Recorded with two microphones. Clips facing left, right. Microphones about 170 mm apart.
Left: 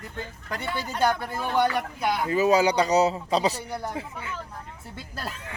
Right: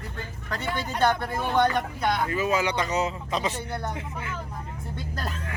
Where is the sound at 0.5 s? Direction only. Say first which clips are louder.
Right 1 dB; 10° left (ahead or behind).